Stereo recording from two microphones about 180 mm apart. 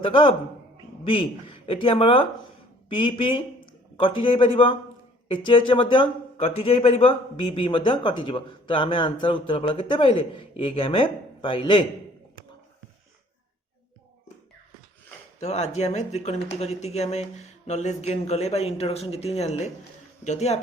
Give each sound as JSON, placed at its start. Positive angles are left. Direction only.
{"t": 0.0, "sound": "speech", "side_deg": 30}
{"t": 15.4, "sound": "speech", "side_deg": 35}